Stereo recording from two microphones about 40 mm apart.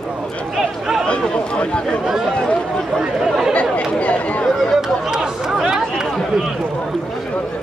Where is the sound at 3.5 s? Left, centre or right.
Left.